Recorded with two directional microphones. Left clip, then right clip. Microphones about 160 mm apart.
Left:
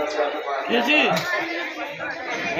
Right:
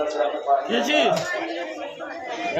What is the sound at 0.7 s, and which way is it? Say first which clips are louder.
Speech: left 6 dB; 25° right (ahead or behind).